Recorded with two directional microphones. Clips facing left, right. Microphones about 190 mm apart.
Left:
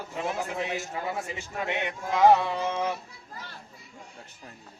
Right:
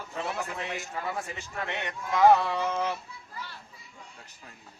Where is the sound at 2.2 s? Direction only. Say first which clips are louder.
Left 1 dB; 20° left (ahead or behind).